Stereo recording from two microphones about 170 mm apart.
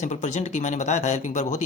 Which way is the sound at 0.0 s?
45° left (ahead or behind).